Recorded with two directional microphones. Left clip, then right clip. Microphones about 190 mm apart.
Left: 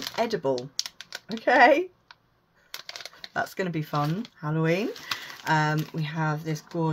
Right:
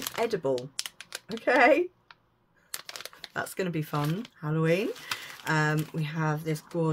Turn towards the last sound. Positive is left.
turn(degrees=-10)  # may be behind; listen again after turning